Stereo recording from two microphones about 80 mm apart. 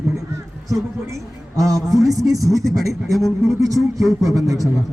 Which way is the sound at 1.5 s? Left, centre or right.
Right.